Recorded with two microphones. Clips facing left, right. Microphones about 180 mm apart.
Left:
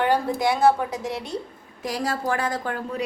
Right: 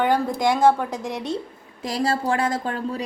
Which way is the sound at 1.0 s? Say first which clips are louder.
Right 1 dB; 20° right (ahead or behind).